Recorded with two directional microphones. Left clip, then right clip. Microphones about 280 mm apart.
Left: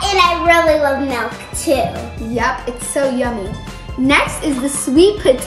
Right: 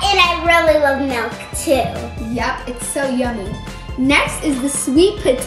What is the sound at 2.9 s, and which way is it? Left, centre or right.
A child's voice, centre.